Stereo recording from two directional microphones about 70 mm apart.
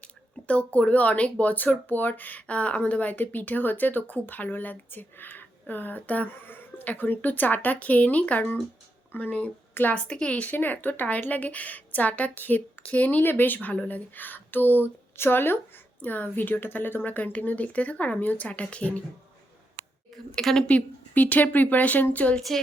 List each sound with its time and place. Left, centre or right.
0.4 s speech: centre
10.1 s speech: centre
20.3 s a woman's voice: centre
20.7 s speech: left
22.4 s a woman's voice: centre